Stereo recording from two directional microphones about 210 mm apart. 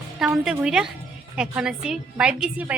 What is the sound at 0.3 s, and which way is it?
A woman's voice, 5° right (ahead or behind).